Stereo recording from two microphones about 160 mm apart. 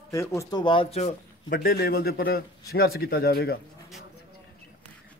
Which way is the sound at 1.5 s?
65° left (ahead or behind).